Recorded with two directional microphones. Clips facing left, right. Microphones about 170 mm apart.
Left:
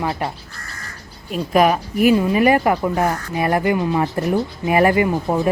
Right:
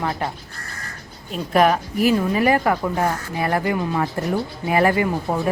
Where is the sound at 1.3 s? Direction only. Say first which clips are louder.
Left 2 dB; 10° left (ahead or behind).